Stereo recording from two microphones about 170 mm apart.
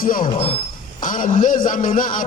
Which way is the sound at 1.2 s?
45° left (ahead or behind).